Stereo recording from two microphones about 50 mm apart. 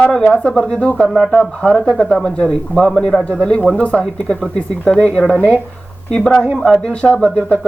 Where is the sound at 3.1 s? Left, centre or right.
Left.